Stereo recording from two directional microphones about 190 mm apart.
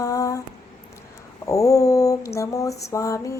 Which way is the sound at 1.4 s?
15° left (ahead or behind).